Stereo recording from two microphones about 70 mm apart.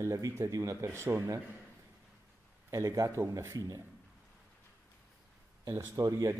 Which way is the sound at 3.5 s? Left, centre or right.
Right.